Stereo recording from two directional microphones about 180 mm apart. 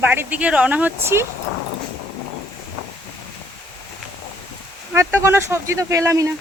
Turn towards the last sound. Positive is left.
turn(degrees=-15)  # may be behind; listen again after turning